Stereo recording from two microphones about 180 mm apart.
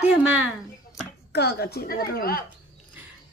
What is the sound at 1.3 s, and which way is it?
A woman's voice, 65° left (ahead or behind).